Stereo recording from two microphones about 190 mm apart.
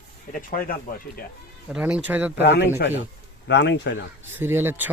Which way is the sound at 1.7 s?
5° right (ahead or behind).